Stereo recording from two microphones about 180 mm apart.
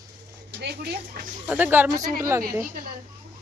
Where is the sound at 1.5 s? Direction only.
10° right (ahead or behind).